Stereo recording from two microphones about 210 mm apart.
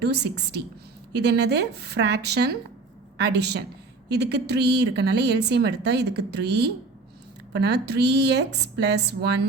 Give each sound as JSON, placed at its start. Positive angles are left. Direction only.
{"t": 0.0, "sound": "a woman's voice", "side_deg": -55}